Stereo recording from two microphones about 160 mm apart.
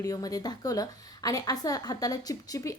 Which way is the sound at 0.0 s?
20° left (ahead or behind).